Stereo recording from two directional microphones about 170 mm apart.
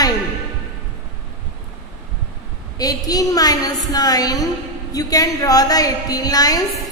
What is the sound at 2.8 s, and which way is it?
A woman's voice, 20° left (ahead or behind).